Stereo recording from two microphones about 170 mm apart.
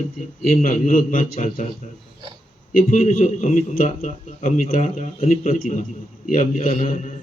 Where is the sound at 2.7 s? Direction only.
45° left (ahead or behind).